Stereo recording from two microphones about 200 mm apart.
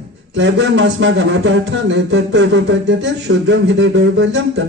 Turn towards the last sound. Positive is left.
turn(degrees=-60)  # may be behind; listen again after turning